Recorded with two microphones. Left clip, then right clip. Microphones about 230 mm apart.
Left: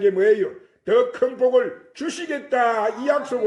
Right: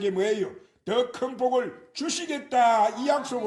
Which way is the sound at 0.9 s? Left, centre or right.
Right.